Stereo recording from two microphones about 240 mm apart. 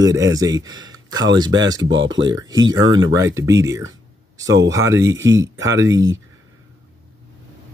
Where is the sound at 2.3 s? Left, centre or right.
Centre.